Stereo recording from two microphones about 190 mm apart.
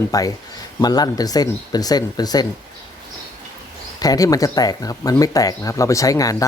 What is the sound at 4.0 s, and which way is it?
Speech, 20° left (ahead or behind).